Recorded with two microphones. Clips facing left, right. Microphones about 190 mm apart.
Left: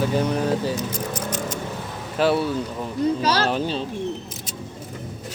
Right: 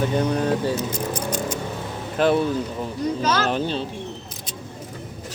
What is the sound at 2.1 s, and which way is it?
Speech, 5° left (ahead or behind).